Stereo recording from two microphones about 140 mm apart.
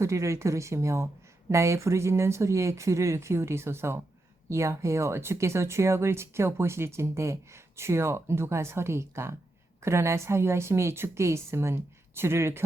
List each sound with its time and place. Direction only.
0.0 s speech: 20° right (ahead or behind)